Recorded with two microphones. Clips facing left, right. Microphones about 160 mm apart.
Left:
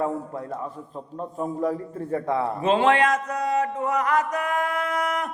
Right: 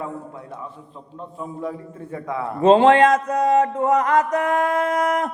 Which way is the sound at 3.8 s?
25° right (ahead or behind).